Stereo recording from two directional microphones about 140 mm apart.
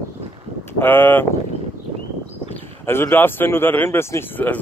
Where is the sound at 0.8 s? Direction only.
15° left (ahead or behind).